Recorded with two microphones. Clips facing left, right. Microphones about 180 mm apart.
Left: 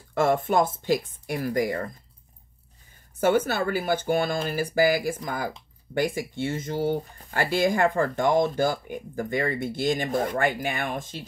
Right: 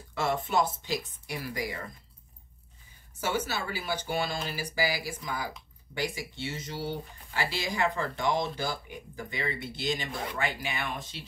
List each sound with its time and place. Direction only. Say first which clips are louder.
0.1 s speech: left 7 dB; 50° left (ahead or behind)
3.2 s speech: left 9 dB; 55° left (ahead or behind)